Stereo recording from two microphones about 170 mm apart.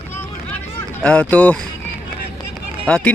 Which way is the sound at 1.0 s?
5° left (ahead or behind).